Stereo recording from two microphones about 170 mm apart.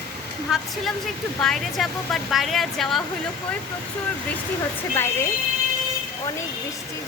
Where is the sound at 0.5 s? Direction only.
5° right (ahead or behind).